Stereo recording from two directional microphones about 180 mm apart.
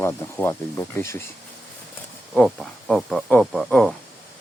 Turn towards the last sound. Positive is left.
turn(degrees=5)  # may be behind; listen again after turning